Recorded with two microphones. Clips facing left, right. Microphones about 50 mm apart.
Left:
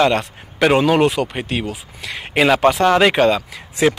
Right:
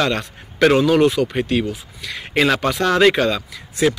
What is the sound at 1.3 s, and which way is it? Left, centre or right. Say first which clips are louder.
Speech: right 3 dB; centre.